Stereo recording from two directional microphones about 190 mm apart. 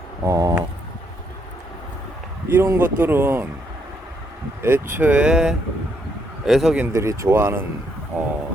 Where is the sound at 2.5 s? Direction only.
10° right (ahead or behind).